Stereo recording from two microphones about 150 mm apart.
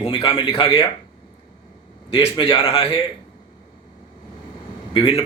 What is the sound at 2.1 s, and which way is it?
Speech, 40° left (ahead or behind).